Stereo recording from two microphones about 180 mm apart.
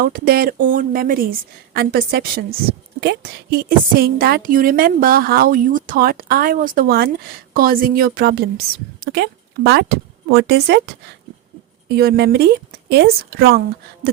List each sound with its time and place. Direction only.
0.0 s a woman's voice: 55° right (ahead or behind)
11.9 s a woman's voice: 65° right (ahead or behind)